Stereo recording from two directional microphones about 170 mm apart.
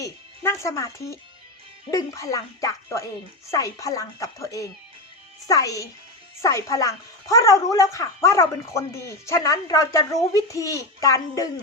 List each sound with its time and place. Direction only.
0.0 s a woman's voice: 15° left (ahead or behind)